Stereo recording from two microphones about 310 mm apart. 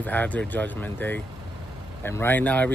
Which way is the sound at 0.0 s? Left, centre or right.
Centre.